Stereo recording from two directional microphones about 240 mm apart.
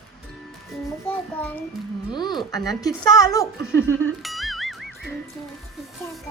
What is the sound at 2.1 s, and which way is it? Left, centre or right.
Child singing, centre.